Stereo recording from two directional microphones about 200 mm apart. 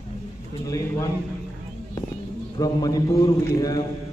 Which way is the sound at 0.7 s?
15° left (ahead or behind).